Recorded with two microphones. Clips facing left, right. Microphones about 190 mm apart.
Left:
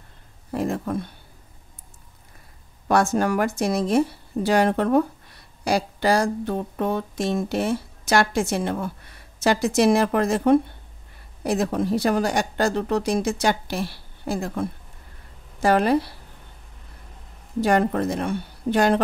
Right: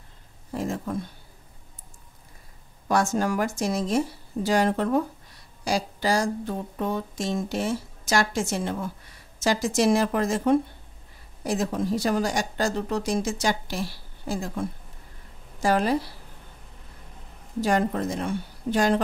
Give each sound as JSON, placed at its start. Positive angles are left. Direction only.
{"t": 0.5, "sound": "speech", "side_deg": 60}
{"t": 2.9, "sound": "speech", "side_deg": 60}
{"t": 17.6, "sound": "speech", "side_deg": 60}